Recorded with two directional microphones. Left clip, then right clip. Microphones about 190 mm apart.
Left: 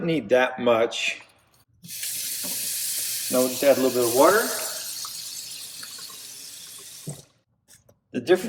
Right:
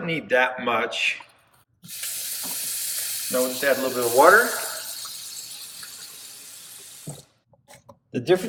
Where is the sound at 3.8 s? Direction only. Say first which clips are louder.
Right 2 dB; centre (ahead or behind).